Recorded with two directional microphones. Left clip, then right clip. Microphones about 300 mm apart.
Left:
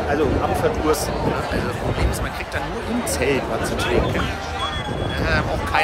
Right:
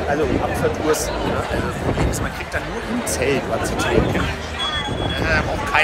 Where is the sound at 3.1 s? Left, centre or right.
Centre.